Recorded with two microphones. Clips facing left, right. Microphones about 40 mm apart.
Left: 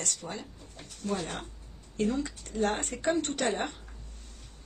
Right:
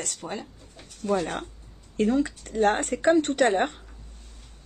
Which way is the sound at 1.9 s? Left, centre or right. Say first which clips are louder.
Right 7 dB; right.